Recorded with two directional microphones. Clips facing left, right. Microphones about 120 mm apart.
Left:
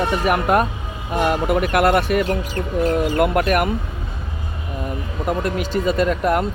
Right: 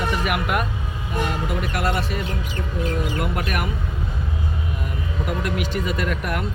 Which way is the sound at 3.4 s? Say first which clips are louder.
Left 8 dB; 50° left (ahead or behind).